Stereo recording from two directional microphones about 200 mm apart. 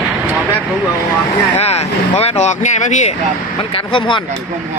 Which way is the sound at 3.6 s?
25° left (ahead or behind).